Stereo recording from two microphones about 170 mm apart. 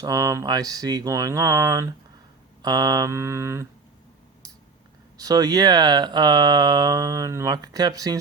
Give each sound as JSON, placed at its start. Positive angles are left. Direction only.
{"t": 0.0, "sound": "speech", "side_deg": -20}
{"t": 2.6, "sound": "mantra", "side_deg": -25}
{"t": 5.1, "sound": "speech", "side_deg": -20}